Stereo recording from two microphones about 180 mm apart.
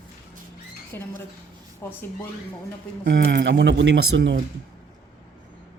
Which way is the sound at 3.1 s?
75° right (ahead or behind).